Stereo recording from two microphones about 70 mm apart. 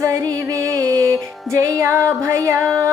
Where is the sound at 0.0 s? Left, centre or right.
Right.